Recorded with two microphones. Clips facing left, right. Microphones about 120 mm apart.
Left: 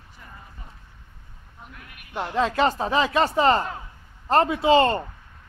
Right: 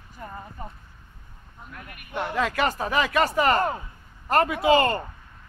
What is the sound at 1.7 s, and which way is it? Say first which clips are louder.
Speech: even; 55° right (ahead or behind).